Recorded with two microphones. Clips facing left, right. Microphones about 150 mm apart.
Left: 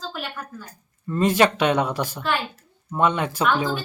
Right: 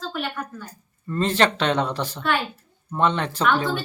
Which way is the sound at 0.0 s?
Centre (ahead or behind).